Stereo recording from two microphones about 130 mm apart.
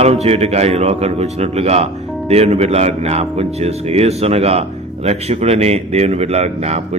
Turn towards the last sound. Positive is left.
turn(degrees=-55)  # may be behind; listen again after turning